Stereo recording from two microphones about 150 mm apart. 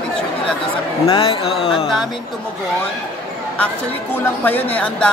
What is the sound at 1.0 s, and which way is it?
Speech, 40° left (ahead or behind).